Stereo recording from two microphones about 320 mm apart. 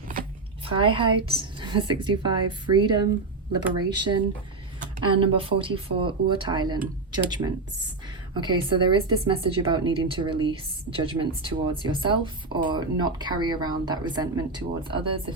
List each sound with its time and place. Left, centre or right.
0.1 s speech: right